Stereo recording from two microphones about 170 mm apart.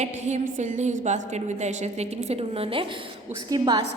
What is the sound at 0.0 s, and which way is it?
A woman's voice, 45° right (ahead or behind).